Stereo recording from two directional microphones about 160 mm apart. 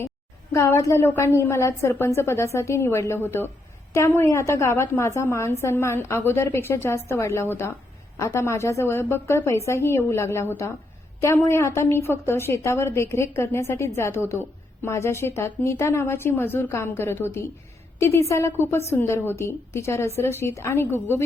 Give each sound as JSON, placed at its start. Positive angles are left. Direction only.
{"t": 0.5, "sound": "a woman's voice", "side_deg": 15}